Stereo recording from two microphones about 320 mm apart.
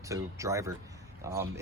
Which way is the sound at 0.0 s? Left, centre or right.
Centre.